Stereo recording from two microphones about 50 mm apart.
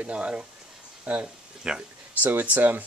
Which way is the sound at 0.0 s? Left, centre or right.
Right.